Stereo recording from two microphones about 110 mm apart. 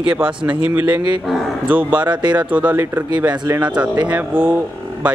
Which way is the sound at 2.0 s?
45° right (ahead or behind).